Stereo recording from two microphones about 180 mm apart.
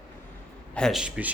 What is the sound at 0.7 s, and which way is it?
Speech, centre (ahead or behind).